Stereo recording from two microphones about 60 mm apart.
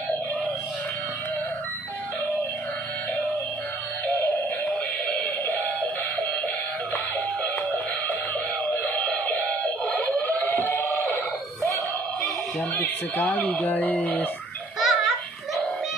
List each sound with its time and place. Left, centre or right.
5.5 s music: left
8.6 s music: left
11.6 s music: centre
12.7 s speech: left
14.8 s baby laughter: centre